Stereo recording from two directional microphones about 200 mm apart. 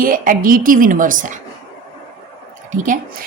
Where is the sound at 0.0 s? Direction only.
45° right (ahead or behind).